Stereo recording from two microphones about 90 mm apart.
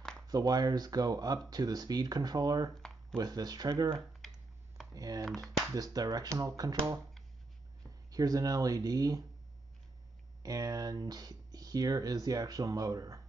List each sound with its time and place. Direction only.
0.3 s speech: 45° right (ahead or behind)
2.7 s a sound: 5° left (ahead or behind)
3.2 s speech: 45° right (ahead or behind)
3.9 s typing: centre (ahead or behind)
4.9 s speech: 40° right (ahead or behind)
8.1 s speech: 40° right (ahead or behind)
10.4 s speech: 40° right (ahead or behind)